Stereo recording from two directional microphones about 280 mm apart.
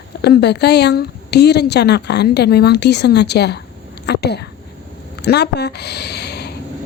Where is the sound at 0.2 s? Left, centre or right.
Left.